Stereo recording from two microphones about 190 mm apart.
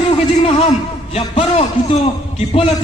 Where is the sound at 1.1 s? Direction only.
30° left (ahead or behind).